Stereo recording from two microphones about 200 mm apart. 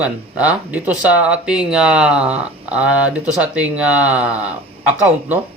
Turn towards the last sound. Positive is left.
turn(degrees=-5)  # may be behind; listen again after turning